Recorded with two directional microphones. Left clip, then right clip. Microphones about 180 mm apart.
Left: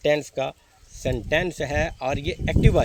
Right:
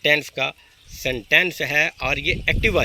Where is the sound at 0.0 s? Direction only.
55° left (ahead or behind).